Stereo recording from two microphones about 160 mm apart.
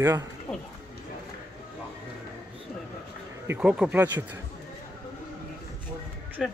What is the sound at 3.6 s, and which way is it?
Speech, 5° right (ahead or behind).